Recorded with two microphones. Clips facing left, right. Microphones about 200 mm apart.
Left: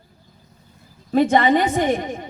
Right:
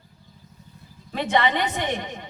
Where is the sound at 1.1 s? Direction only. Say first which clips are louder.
Left 7 dB; 45° left (ahead or behind).